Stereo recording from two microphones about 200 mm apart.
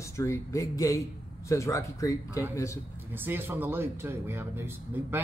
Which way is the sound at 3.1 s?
10° right (ahead or behind).